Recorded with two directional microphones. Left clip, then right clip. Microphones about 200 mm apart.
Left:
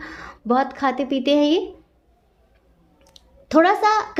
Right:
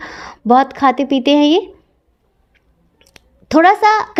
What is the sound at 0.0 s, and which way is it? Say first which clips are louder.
Speech: right 7 dB; 35° right (ahead or behind).